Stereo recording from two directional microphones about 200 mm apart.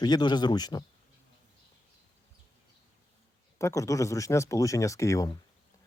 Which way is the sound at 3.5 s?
15° left (ahead or behind).